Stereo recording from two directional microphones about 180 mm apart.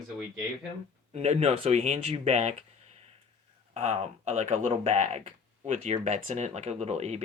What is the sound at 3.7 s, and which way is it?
Speech, 40° right (ahead or behind).